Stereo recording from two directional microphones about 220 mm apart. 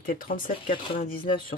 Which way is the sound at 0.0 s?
40° left (ahead or behind).